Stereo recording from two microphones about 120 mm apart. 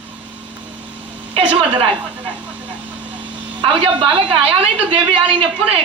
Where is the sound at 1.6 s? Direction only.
50° right (ahead or behind).